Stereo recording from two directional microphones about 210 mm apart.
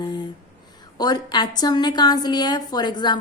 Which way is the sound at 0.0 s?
20° left (ahead or behind).